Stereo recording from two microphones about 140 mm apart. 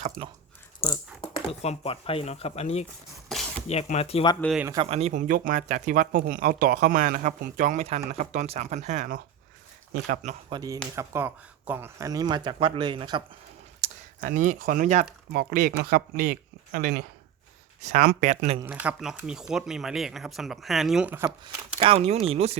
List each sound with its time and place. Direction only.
1.2 s speech: 45° left (ahead or behind)
3.2 s a sound: centre (ahead or behind)
3.9 s speech: 45° left (ahead or behind)
4.8 s speech: 45° right (ahead or behind); by 10.3 s 80° right
10.5 s speech: 25° right (ahead or behind)
10.9 s speech: 15° right (ahead or behind); by 13.2 s 35° right (ahead or behind)
13.8 s a sound: 45° right (ahead or behind)
14.2 s speech: 70° right (ahead or behind)
15.3 s speech: 90° right
18.0 s speech: 90° right
18.3 s speech: 50° right (ahead or behind)
18.6 s speech: 10° right (ahead or behind)
21.2 s speech: 35° right (ahead or behind)